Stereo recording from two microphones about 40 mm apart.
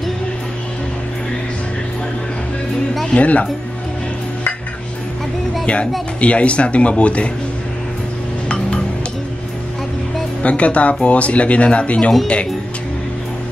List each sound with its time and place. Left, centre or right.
3.2 s speech: left
5.7 s speech: left
10.4 s speech: left